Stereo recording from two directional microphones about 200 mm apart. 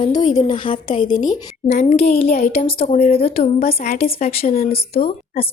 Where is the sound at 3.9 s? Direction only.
50° left (ahead or behind).